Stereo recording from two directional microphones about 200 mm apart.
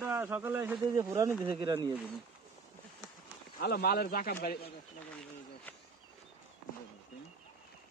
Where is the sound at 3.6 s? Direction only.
50° left (ahead or behind).